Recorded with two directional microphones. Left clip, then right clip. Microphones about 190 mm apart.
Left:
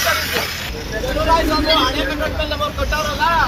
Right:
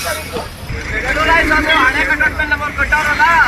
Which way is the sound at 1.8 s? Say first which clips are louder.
Right 7 dB; 25° left (ahead or behind).